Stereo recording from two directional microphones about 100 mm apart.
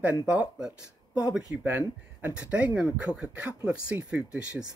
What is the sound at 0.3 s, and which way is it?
Speech, 10° right (ahead or behind).